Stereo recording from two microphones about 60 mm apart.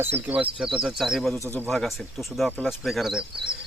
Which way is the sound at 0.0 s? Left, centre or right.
Right.